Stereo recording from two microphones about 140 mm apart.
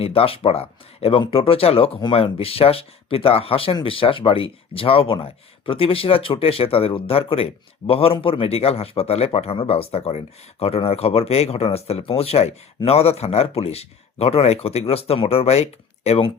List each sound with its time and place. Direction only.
0.0 s speech: 45° left (ahead or behind)